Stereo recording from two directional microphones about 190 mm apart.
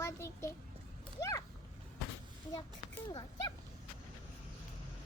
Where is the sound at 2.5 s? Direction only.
20° left (ahead or behind).